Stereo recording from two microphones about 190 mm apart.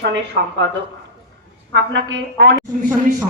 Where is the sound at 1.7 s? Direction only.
70° right (ahead or behind).